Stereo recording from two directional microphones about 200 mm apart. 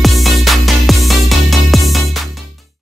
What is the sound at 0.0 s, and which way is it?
Music, centre (ahead or behind).